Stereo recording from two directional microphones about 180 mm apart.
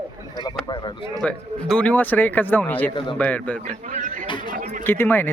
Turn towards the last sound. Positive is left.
turn(degrees=10)  # may be behind; listen again after turning